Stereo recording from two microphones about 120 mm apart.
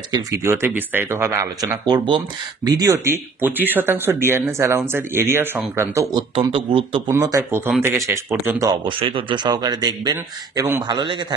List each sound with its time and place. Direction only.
0.1 s speech: 25° right (ahead or behind)
1.9 s speech: 45° right (ahead or behind)
2.6 s speech: 30° right (ahead or behind)
6.3 s speech: 50° right (ahead or behind)
7.1 s speech: 25° right (ahead or behind)
8.6 s a man's voice: 45° right (ahead or behind)